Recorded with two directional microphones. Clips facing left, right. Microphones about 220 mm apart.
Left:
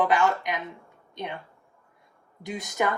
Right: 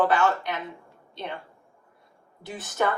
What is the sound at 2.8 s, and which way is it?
Speech, 15° left (ahead or behind).